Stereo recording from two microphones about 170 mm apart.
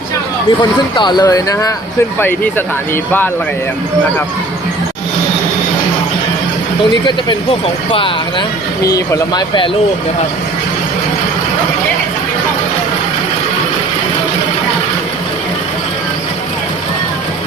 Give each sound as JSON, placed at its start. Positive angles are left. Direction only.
{"t": 0.6, "sound": "speech", "side_deg": 25}
{"t": 7.9, "sound": "speech", "side_deg": 30}